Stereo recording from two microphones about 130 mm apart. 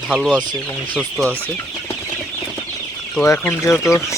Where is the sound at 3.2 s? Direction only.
20° left (ahead or behind).